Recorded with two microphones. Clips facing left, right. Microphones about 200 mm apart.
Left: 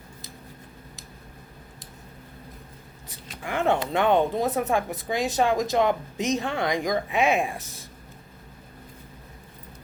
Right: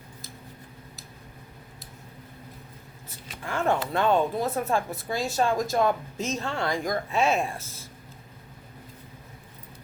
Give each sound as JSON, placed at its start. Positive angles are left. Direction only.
{"t": 3.4, "sound": "speech", "side_deg": 15}